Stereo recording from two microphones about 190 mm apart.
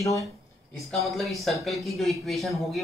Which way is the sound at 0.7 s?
Centre (ahead or behind).